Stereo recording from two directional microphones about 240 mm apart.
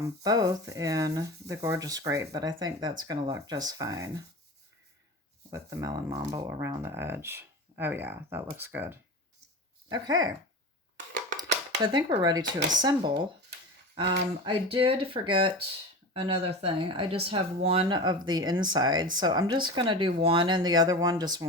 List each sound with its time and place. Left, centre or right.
0.0 s speech: centre
5.5 s speech: centre
11.3 s a sound: centre
12.8 s speech: centre